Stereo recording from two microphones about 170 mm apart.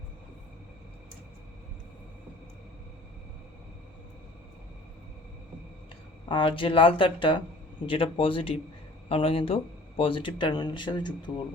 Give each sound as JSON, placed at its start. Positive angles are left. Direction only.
{"t": 6.2, "sound": "speech", "side_deg": 30}